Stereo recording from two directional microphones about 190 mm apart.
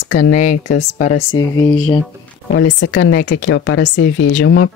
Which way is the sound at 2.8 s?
80° left.